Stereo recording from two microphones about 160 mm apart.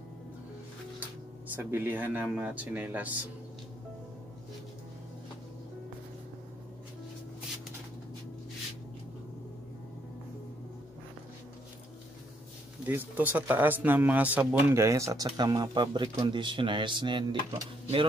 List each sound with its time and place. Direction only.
1.5 s speech: 10° right (ahead or behind)
12.8 s speech: 10° right (ahead or behind); by 18.0 s 30° right (ahead or behind)